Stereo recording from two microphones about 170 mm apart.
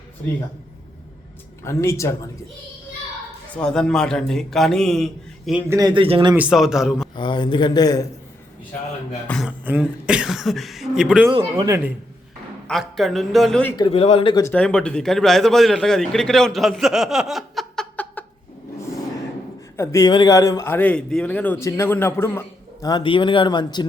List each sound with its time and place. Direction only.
1.6 s a man's voice: 15° left (ahead or behind)
3.5 s a man's voice: 5° left (ahead or behind)
5.6 s a man's voice: 20° right (ahead or behind)
6.3 s a man's voice: 5° right (ahead or behind)
7.2 s speech: 30° left (ahead or behind)
9.2 s a sound: 5° left (ahead or behind)
9.5 s a man's voice: 10° right (ahead or behind)
11.3 s a man's voice: 25° right (ahead or behind)
12.6 s a man's voice: centre (ahead or behind)
13.7 s speech: 30° left (ahead or behind)
14.5 s a man's voice: 5° left (ahead or behind)
19.7 s a man's voice: 15° left (ahead or behind)